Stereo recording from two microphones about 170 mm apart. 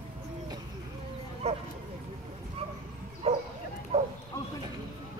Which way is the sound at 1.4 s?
40° right (ahead or behind).